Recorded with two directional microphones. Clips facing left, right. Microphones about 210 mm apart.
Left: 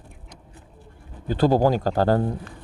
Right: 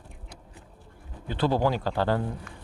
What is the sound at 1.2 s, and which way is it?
Speech, 40° left (ahead or behind).